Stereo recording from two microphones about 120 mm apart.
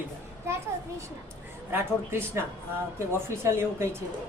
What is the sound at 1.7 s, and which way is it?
A woman's voice, 20° right (ahead or behind).